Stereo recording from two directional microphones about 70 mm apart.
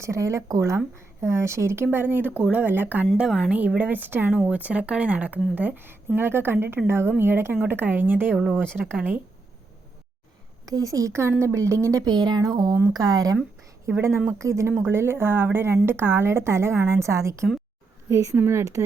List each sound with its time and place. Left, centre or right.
0.0 s a woman's voice: right
1.2 s speech: right
3.2 s a woman's voice: centre
3.8 s a woman's voice: right
10.7 s a woman's voice: right
12.0 s speech: right
13.9 s a woman's voice: right
18.3 s a woman's voice: right